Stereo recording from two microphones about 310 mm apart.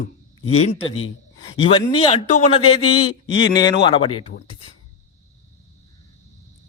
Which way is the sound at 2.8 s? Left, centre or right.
Left.